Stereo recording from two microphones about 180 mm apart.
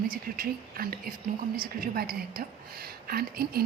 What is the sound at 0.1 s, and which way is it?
A woman's voice, 55° right (ahead or behind).